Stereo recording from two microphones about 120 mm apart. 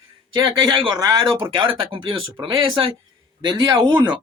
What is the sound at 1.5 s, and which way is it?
Speech, 45° right (ahead or behind).